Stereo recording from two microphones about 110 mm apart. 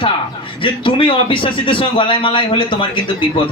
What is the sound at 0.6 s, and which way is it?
A man's voice, 50° left (ahead or behind).